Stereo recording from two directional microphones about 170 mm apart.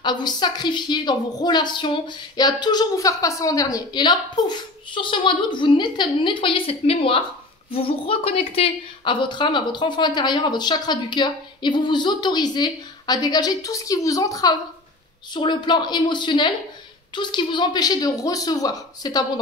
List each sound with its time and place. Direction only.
0.0 s a woman's voice: 25° left (ahead or behind)